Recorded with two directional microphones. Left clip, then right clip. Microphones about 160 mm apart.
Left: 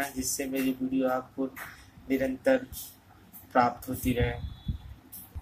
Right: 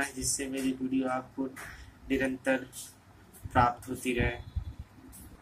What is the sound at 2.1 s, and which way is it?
Speech, 45° left (ahead or behind).